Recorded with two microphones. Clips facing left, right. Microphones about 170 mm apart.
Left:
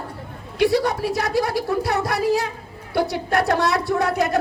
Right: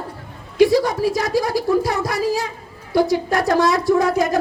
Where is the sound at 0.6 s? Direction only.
60° left (ahead or behind).